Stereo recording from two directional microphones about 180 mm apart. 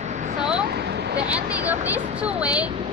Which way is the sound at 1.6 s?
10° right (ahead or behind).